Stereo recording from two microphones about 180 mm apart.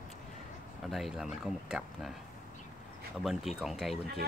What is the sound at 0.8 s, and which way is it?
Speech, centre (ahead or behind).